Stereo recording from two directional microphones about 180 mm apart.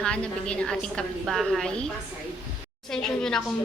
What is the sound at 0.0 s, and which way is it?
A woman's voice, 5° left (ahead or behind).